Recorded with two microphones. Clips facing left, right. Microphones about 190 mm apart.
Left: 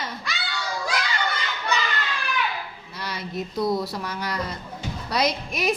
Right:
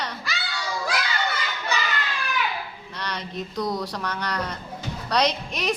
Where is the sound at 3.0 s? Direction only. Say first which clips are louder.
Left 1 dB; 10° left (ahead or behind).